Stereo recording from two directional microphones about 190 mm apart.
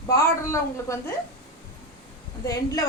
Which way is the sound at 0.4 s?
15° left (ahead or behind).